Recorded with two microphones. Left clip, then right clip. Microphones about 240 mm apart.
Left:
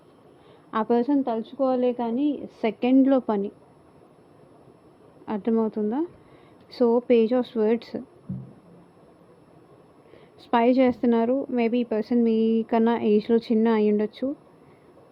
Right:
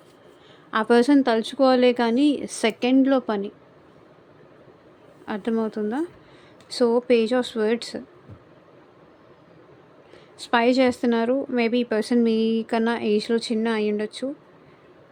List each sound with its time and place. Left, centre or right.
0.9 s a woman's voice: right
2.8 s speech: centre
5.2 s speech: centre
10.3 s speech: centre